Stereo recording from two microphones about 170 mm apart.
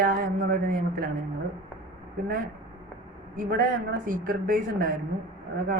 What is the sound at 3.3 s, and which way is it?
Speech, 50° right (ahead or behind).